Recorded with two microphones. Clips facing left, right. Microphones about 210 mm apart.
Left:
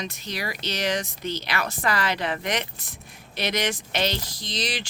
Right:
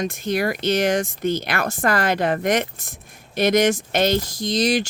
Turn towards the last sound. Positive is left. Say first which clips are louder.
# right 11 dB
turn(degrees=-45)  # may be behind; listen again after turning